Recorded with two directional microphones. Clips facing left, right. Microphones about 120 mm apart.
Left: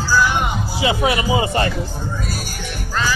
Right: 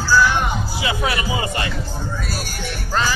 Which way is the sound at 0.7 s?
25° left (ahead or behind).